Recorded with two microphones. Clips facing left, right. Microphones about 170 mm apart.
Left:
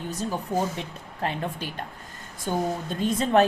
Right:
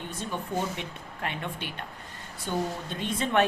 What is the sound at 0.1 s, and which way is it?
Speech, 35° left (ahead or behind).